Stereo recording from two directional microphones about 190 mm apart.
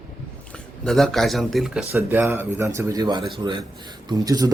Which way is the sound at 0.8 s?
Centre (ahead or behind).